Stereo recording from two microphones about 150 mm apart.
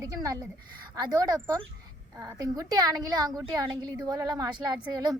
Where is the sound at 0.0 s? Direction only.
25° right (ahead or behind).